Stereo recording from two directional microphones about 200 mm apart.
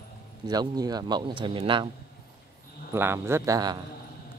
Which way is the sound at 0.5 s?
20° right (ahead or behind).